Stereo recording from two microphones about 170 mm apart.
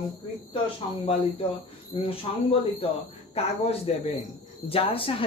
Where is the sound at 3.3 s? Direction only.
35° left (ahead or behind).